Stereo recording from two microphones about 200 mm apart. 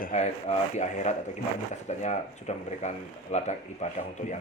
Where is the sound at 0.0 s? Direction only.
35° left (ahead or behind).